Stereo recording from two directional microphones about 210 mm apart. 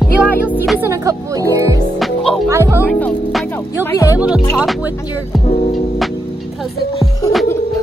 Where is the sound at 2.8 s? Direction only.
5° left (ahead or behind).